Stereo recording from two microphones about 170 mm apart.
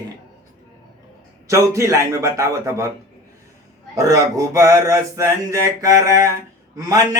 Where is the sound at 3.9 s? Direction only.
20° right (ahead or behind).